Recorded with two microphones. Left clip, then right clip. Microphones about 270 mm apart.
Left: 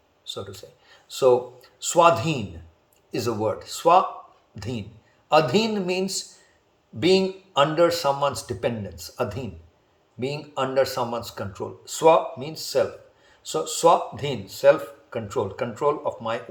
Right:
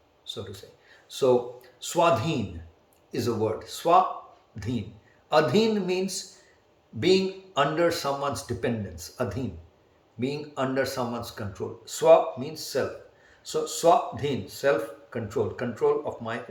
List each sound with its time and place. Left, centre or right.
0.5 s a man's voice: centre